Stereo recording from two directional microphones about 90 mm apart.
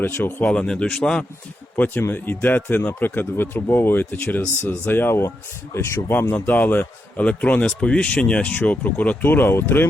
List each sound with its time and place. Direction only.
0.0 s speech: 25° left (ahead or behind)
0.4 s a man's voice: 10° left (ahead or behind)
1.7 s a man's voice: 20° left (ahead or behind)